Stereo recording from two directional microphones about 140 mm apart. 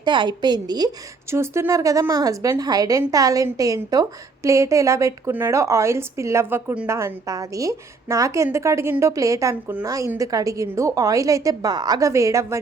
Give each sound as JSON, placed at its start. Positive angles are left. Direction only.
{"t": 0.0, "sound": "a woman's voice", "side_deg": -35}
{"t": 1.3, "sound": "a woman's voice", "side_deg": -20}